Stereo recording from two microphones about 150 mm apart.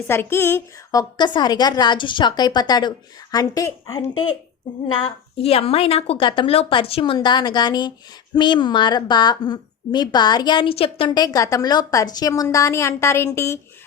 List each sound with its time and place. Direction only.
0.1 s a woman's voice: 15° left (ahead or behind)
5.0 s a woman's voice: 40° left (ahead or behind); by 13.6 s 20° left (ahead or behind)